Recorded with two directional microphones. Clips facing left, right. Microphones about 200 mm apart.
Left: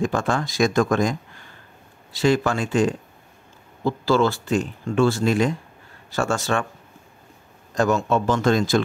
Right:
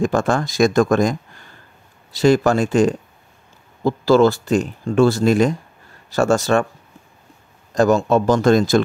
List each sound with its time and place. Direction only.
0.0 s speech: 45° right (ahead or behind)
2.1 s speech: 40° right (ahead or behind)
7.7 s speech: 35° right (ahead or behind)